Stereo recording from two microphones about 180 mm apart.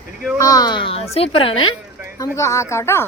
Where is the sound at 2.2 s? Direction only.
15° left (ahead or behind).